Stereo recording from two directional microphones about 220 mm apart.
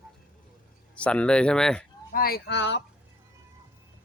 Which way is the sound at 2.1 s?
45° left (ahead or behind).